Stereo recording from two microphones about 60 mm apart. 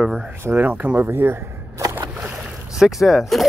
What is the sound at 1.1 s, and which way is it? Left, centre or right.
Speech, right.